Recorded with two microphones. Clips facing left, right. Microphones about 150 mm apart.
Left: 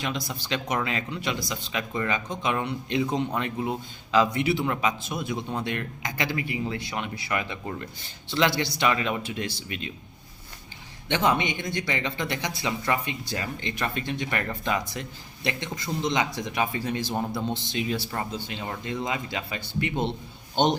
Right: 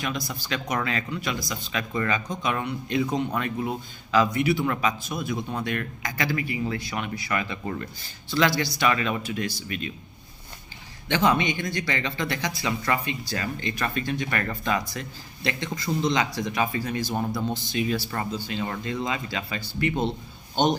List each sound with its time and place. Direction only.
0.0 s speech: 25° left (ahead or behind)
11.1 s speech: 25° left (ahead or behind)